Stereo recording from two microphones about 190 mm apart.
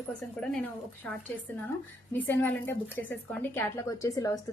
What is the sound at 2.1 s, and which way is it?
A woman's voice, 10° left (ahead or behind).